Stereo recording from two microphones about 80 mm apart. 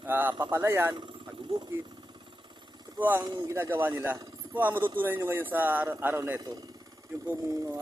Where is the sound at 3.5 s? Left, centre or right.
Right.